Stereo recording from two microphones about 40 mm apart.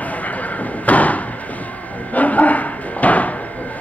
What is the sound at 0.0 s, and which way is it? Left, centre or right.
Slam, left.